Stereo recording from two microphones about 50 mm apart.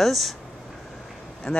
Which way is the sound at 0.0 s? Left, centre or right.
Centre.